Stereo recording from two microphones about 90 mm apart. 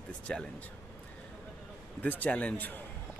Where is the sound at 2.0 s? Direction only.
15° left (ahead or behind).